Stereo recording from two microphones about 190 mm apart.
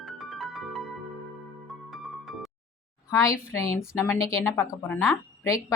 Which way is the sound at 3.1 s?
15° left (ahead or behind).